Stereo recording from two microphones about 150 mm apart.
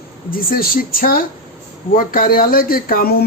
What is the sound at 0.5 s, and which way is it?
A woman's voice, 75° left (ahead or behind).